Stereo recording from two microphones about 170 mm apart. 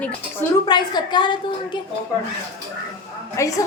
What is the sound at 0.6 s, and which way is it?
A woman's voice, 25° left (ahead or behind).